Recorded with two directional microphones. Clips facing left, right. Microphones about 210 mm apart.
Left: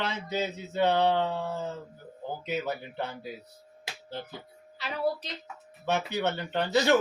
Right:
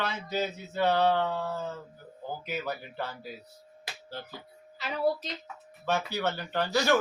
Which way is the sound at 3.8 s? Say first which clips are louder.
Left 2 dB; 20° left (ahead or behind).